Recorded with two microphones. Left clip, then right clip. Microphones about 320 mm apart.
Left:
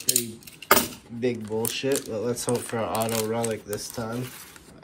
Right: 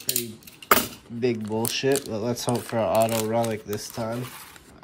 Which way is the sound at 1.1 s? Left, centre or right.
Centre.